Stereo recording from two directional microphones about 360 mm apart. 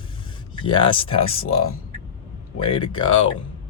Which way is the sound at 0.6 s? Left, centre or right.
Centre.